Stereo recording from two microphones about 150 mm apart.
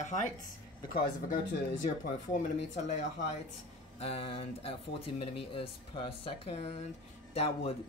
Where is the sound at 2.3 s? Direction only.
55° left (ahead or behind).